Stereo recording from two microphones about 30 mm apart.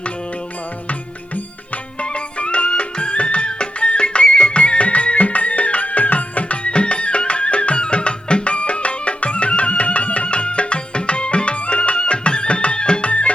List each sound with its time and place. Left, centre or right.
2.0 s music: left
10.2 s music: left
13.1 s music: left